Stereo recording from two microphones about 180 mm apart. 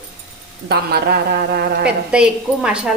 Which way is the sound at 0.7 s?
60° right (ahead or behind).